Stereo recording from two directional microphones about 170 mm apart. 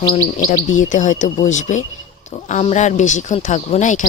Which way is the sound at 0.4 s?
50° left (ahead or behind).